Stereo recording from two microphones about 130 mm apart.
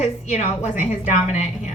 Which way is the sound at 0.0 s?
60° left (ahead or behind).